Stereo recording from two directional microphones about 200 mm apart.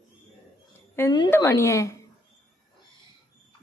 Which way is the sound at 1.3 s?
15° left (ahead or behind).